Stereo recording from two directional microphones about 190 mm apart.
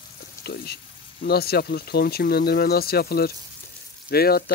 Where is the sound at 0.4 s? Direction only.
55° left (ahead or behind).